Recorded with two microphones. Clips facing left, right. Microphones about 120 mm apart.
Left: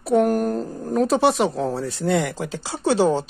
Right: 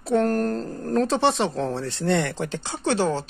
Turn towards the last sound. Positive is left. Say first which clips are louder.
# left 4 dB
turn(degrees=10)  # may be behind; listen again after turning